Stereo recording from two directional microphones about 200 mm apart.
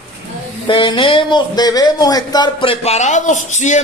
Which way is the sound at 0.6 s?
25° left (ahead or behind).